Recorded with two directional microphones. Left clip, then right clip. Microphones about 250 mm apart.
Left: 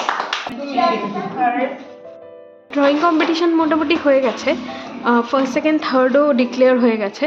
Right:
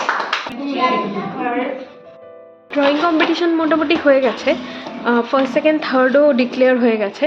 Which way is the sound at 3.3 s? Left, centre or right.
Centre.